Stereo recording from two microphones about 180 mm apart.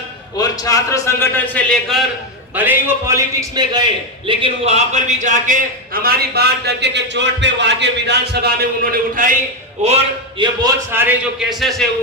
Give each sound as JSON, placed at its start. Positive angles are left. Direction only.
{"t": 0.3, "sound": "a man's voice", "side_deg": 20}
{"t": 2.6, "sound": "a man's voice", "side_deg": -10}
{"t": 9.8, "sound": "a man's voice", "side_deg": -30}
{"t": 10.9, "sound": "a man's voice", "side_deg": -5}